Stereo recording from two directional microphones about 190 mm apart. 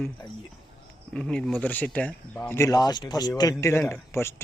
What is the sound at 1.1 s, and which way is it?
Speech, 5° left (ahead or behind).